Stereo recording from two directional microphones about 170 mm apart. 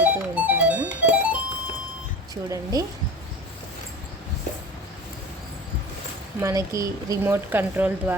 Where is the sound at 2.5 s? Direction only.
20° right (ahead or behind).